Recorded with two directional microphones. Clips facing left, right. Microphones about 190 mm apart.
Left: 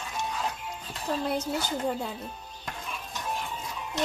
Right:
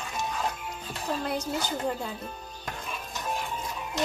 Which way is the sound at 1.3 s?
Centre (ahead or behind).